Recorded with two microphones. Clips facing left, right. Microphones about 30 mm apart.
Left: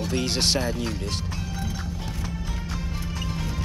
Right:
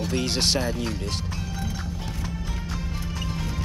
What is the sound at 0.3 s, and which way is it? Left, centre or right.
Speech, right.